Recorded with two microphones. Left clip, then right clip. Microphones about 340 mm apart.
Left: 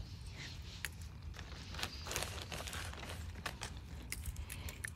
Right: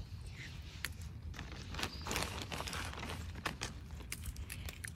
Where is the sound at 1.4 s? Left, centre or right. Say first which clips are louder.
Right 2 dB; centre.